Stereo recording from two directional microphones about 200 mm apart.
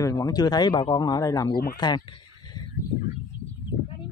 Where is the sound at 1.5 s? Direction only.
50° left (ahead or behind).